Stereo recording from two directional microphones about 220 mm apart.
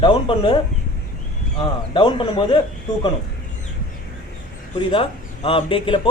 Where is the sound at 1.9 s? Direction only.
20° left (ahead or behind).